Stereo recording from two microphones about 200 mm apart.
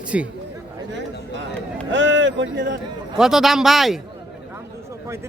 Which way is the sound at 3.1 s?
5° right (ahead or behind).